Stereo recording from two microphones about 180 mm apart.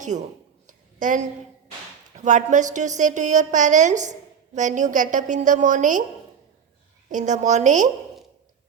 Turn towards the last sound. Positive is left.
turn(degrees=-45)  # may be behind; listen again after turning